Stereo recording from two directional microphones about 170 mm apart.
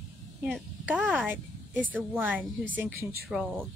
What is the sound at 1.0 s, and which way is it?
Speech, 10° right (ahead or behind).